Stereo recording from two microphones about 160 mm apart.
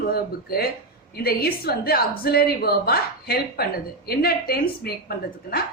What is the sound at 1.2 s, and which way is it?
A woman's voice, 75° left (ahead or behind).